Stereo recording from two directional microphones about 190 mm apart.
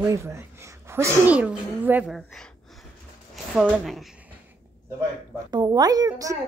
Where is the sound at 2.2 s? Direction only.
5° left (ahead or behind).